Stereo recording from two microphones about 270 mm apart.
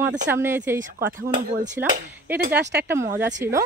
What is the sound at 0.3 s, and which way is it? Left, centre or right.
Speech, centre.